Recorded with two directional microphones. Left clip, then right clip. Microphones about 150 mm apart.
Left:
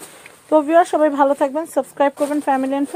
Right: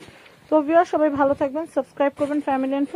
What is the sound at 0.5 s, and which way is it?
Speech, 35° left (ahead or behind).